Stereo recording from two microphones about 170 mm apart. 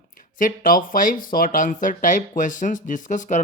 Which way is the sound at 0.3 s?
55° left (ahead or behind).